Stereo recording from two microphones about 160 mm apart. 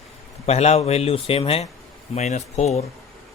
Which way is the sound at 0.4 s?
40° left (ahead or behind).